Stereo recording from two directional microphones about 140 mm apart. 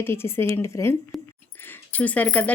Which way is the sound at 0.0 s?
15° left (ahead or behind).